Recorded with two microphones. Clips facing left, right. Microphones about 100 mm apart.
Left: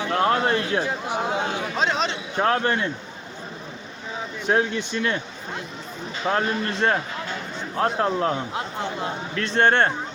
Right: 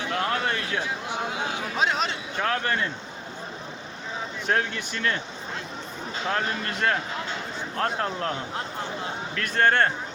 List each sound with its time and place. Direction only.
0.1 s speech: 30° left (ahead or behind)
1.6 s speech: 5° right (ahead or behind)
2.4 s speech: 30° left (ahead or behind)
4.4 s speech: 20° left (ahead or behind)
6.2 s speech: 25° left (ahead or behind)